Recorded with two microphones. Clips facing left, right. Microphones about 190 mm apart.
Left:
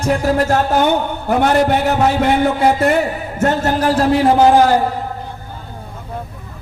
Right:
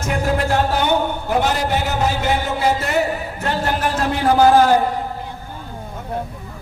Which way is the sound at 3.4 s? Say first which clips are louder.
Left 7 dB; 45° left (ahead or behind).